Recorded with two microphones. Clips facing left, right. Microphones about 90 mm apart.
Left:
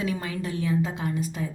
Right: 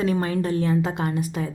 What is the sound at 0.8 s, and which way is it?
Speech, 65° right (ahead or behind).